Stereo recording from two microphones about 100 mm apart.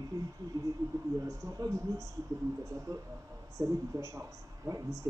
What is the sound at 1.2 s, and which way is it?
Speech, 30° right (ahead or behind).